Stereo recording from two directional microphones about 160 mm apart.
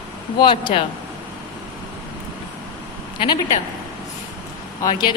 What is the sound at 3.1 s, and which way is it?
Speech, 30° left (ahead or behind).